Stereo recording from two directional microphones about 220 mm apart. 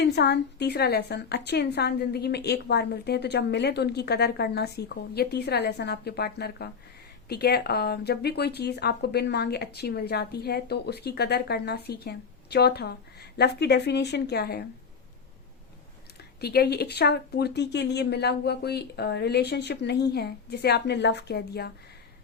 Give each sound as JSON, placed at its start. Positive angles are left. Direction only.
{"t": 0.0, "sound": "speech", "side_deg": 50}
{"t": 16.4, "sound": "speech", "side_deg": 45}